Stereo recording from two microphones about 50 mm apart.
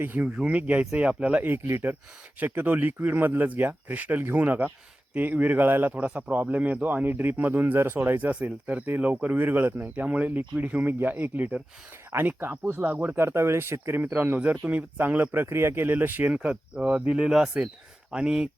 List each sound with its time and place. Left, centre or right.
0.4 s speech: right
1.4 s speech: right
5.9 s speech: right
8.3 s speech: right
12.1 s speech: right
12.7 s speech: right
13.1 s speech: right
16.3 s speech: right
17.2 s speech: centre